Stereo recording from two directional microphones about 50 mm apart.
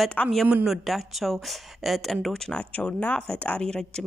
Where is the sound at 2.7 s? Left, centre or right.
Left.